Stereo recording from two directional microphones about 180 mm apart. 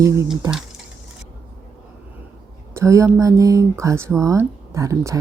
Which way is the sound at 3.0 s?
15° right (ahead or behind).